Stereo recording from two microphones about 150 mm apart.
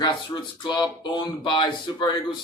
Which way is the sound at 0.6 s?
30° left (ahead or behind).